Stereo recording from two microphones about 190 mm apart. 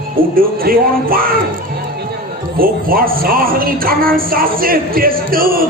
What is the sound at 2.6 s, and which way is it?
Speech, 50° right (ahead or behind).